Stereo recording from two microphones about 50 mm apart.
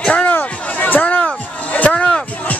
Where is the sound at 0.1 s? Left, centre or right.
Left.